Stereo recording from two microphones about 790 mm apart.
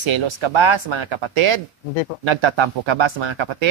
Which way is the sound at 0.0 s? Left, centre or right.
Right.